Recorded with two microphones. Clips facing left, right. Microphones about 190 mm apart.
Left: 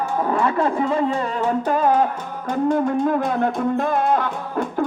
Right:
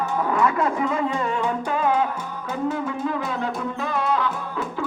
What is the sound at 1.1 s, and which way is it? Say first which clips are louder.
Music: left 3 dB; 40° left (ahead or behind).